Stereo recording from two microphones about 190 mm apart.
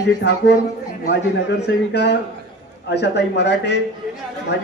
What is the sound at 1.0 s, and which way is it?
A man's voice, 65° left (ahead or behind).